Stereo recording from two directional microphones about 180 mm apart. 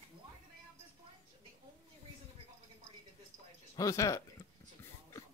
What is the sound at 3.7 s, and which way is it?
Speech, 20° left (ahead or behind).